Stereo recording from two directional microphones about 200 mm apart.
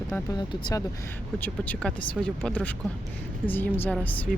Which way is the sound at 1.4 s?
5° left (ahead or behind).